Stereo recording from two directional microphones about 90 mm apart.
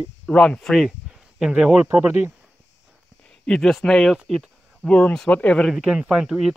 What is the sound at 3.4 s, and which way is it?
Speech, 5° left (ahead or behind).